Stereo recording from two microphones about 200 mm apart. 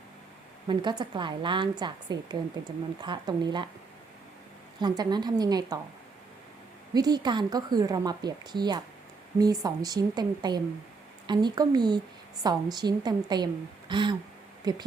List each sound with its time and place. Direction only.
0.7 s speech: 20° right (ahead or behind)
4.8 s speech: 20° right (ahead or behind)
6.9 s speech: 20° right (ahead or behind)